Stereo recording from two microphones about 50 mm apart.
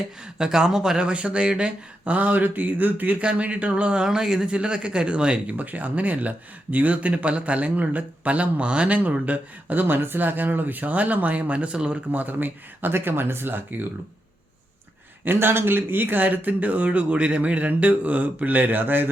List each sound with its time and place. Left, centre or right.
0.3 s speech: centre
2.1 s speech: right
3.2 s speech: right
9.8 s speech: right
12.1 s speech: right
15.2 s speech: right